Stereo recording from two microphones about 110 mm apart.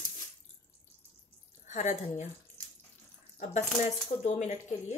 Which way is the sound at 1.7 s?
90° left.